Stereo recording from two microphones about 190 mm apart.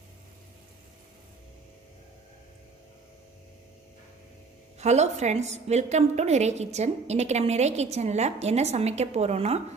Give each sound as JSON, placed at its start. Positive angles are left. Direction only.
{"t": 4.8, "sound": "a woman's voice", "side_deg": -35}